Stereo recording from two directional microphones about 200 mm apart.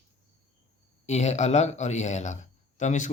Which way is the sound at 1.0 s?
35° left (ahead or behind).